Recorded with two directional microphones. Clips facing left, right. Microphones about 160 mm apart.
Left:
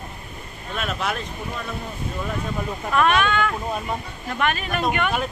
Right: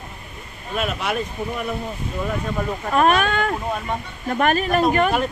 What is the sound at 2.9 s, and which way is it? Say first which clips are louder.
Speech: right 2 dB; 40° right (ahead or behind).